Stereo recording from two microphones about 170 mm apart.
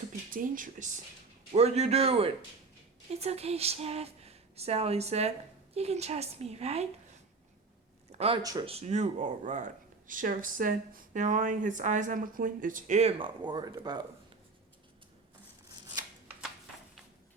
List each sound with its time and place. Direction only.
0.3 s speech: 55° right (ahead or behind)
8.4 s speech: 20° right (ahead or behind)
8.6 s speech: 40° right (ahead or behind)
15.7 s chopping: 25° right (ahead or behind)